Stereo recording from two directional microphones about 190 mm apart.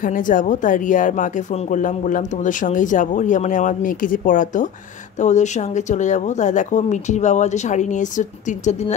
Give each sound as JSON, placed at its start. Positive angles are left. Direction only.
{"t": 0.0, "sound": "speech", "side_deg": 45}